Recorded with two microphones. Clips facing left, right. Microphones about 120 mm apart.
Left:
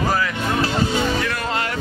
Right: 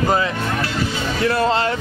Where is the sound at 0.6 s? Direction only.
30° left (ahead or behind).